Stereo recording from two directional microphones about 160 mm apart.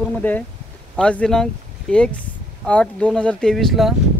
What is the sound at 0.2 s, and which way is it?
Speech, 10° left (ahead or behind).